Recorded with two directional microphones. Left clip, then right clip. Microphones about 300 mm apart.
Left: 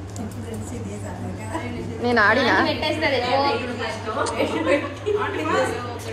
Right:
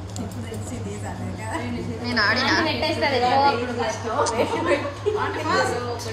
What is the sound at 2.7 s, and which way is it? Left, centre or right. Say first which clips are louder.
Speech: even; right.